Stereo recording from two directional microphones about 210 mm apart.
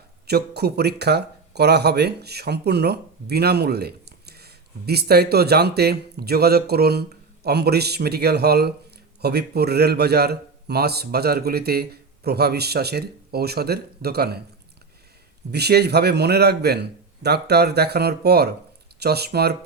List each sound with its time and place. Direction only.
0.3 s speech: 50° right (ahead or behind)
15.5 s speech: 50° right (ahead or behind)